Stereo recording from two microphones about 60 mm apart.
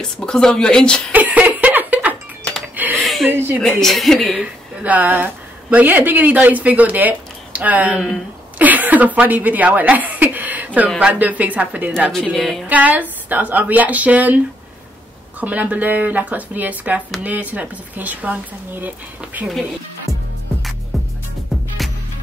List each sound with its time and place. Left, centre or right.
0.2 s speech: centre
1.1 s music: right
2.7 s a sound: right
3.0 s a sound: centre
3.3 s speech: right
3.8 s a woman's voice: centre
4.8 s a woman's voice: right
12.1 s a woman's voice: centre
12.6 s speech: right
15.4 s speech: right